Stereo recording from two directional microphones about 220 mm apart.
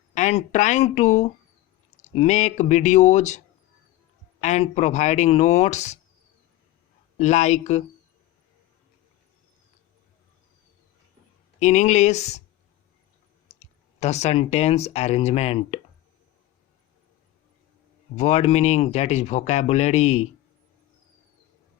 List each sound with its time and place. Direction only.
0.1 s speech: 30° left (ahead or behind)
7.2 s speech: 30° left (ahead or behind)
11.6 s speech: 30° left (ahead or behind)
13.5 s speech: 30° left (ahead or behind)
18.2 s speech: 30° left (ahead or behind)